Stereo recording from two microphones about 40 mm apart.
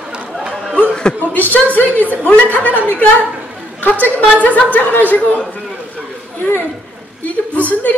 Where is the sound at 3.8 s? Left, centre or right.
Left.